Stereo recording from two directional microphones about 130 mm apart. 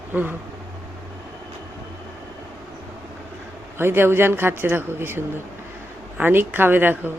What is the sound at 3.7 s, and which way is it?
A woman's voice, 20° right (ahead or behind).